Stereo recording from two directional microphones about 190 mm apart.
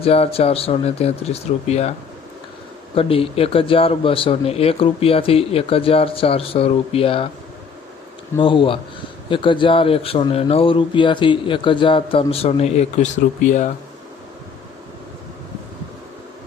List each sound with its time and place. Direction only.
0.0 s a man's voice: 30° left (ahead or behind)
8.4 s a man's voice: 25° left (ahead or behind)